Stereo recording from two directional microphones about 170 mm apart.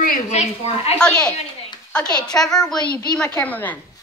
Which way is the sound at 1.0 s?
5° left (ahead or behind).